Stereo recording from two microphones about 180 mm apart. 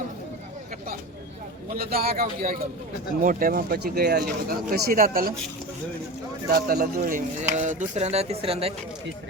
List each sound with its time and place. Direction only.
1.7 s speech: 55° right (ahead or behind)
6.5 s a man's voice: 55° right (ahead or behind); by 8.7 s 30° right (ahead or behind)